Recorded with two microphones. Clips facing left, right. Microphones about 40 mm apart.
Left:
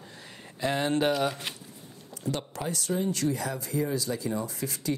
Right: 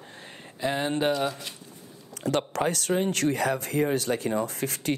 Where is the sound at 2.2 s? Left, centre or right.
Right.